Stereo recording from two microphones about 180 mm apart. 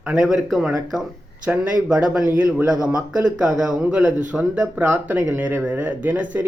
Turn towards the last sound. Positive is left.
turn(degrees=-10)  # may be behind; listen again after turning